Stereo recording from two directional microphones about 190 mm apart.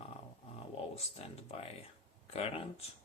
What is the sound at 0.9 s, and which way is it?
Speech, 30° left (ahead or behind).